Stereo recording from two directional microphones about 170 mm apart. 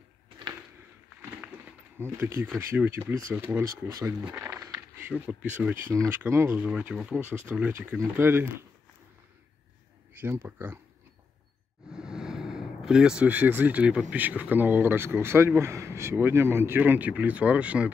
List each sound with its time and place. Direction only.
2.0 s a man's voice: 15° right (ahead or behind)
10.1 s a man's voice: 10° right (ahead or behind)
11.9 s a sound: 5° right (ahead or behind)
14.1 s a man's voice: 10° right (ahead or behind)